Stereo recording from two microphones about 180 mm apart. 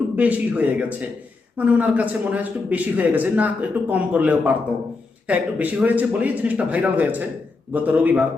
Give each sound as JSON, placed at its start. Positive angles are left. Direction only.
{"t": 0.2, "sound": "a man's voice", "side_deg": -10}